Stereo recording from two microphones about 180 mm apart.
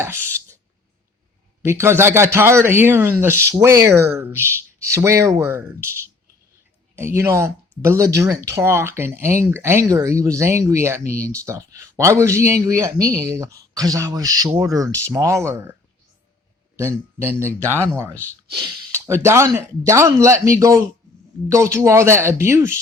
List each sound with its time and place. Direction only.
0.0 s a sound: 15° right (ahead or behind)
1.6 s speech: 15° right (ahead or behind)
16.7 s speech: 10° right (ahead or behind)